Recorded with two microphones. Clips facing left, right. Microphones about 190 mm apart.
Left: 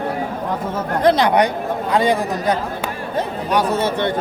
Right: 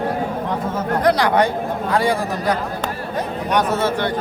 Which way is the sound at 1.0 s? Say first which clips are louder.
Left 2 dB; 25° left (ahead or behind).